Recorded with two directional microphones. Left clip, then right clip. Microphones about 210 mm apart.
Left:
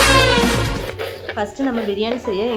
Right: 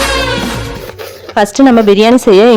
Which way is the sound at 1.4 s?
55° right (ahead or behind).